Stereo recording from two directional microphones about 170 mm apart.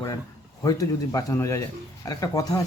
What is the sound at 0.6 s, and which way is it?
Speech, 20° left (ahead or behind).